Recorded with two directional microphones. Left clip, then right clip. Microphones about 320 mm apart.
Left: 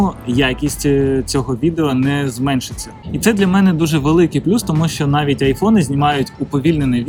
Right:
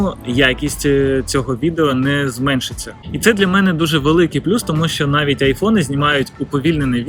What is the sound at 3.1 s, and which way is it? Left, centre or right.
Speech, centre.